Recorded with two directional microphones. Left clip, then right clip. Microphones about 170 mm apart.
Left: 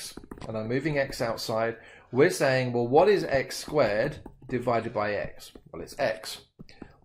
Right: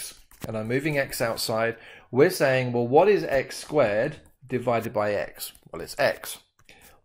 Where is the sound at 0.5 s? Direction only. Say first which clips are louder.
Right 3 dB; 45° right (ahead or behind).